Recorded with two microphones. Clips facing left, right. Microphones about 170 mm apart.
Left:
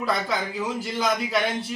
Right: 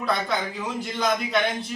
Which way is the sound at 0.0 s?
5° left (ahead or behind).